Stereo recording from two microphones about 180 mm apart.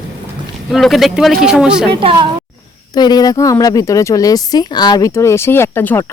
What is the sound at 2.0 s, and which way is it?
Speech, 30° right (ahead or behind).